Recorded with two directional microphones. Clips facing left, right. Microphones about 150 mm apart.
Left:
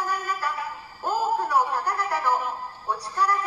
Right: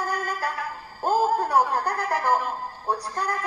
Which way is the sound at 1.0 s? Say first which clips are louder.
Right 3 dB; 45° right (ahead or behind).